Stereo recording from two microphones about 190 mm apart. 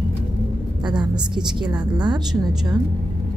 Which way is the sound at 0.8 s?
20° right (ahead or behind).